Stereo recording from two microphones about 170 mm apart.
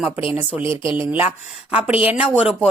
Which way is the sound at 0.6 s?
30° left (ahead or behind).